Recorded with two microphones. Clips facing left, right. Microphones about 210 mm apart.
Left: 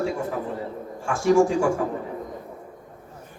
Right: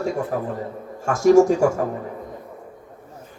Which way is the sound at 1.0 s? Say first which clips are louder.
Right 5 dB; 40° right (ahead or behind).